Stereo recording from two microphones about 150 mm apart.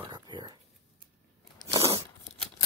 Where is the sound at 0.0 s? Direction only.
30° right (ahead or behind).